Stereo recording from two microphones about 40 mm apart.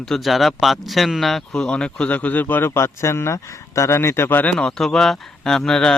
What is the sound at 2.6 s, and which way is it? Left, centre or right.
Speech, left.